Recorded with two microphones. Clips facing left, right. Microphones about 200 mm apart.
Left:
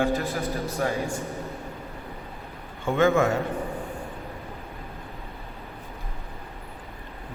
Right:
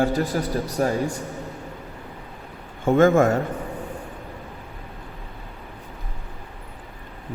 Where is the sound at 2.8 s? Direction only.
45° right (ahead or behind).